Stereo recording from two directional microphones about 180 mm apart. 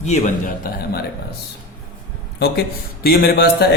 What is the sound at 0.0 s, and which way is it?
A man's voice, 40° left (ahead or behind).